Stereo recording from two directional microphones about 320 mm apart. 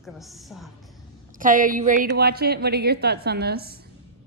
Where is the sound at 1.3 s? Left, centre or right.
Right.